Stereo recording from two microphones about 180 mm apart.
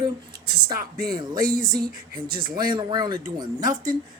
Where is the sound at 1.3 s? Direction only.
50° right (ahead or behind).